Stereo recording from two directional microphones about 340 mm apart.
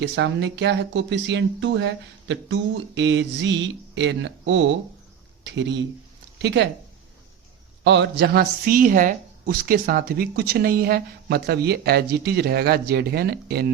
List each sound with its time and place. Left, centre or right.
0.0 s speech: right
7.9 s speech: right